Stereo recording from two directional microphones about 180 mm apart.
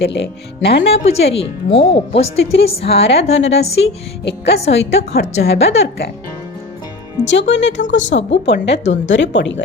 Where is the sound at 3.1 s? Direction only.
35° left (ahead or behind).